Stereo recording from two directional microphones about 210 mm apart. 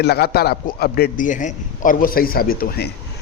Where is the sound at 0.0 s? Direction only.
50° left (ahead or behind).